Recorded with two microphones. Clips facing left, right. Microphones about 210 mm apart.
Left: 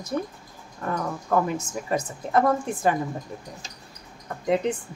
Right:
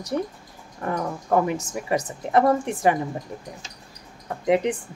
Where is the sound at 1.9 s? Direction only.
85° right.